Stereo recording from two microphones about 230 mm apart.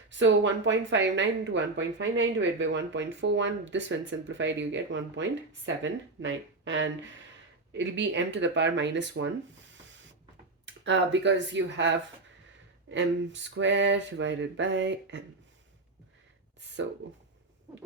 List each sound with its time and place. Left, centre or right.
0.1 s speech: right
10.8 s speech: right